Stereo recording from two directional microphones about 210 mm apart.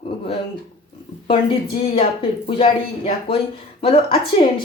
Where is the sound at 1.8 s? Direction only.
25° left (ahead or behind).